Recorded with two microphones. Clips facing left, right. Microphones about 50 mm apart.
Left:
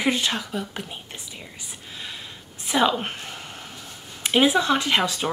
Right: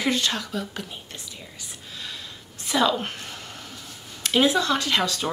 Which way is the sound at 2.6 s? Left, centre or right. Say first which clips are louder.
Left 1 dB; left.